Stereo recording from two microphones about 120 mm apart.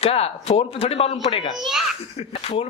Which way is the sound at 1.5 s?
Centre (ahead or behind).